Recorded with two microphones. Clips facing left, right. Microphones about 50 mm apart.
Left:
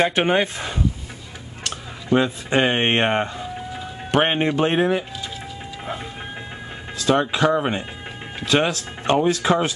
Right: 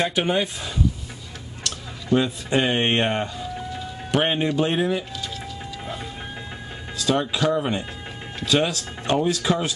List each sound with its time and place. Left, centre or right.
0.0 s speech: left
1.6 s a sound: left
4.1 s speech: left
7.0 s speech: left